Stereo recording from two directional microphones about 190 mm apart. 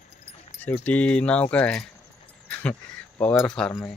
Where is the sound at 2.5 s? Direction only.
5° left (ahead or behind).